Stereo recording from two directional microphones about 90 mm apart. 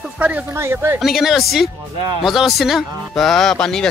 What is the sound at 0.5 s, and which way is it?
Speech, 30° right (ahead or behind).